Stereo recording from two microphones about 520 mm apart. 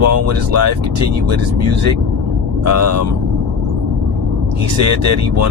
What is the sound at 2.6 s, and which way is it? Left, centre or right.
Speech, right.